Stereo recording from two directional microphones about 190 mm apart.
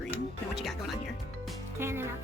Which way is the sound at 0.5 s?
Centre (ahead or behind).